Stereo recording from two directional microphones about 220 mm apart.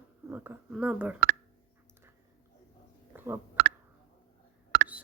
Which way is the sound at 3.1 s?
10° right (ahead or behind).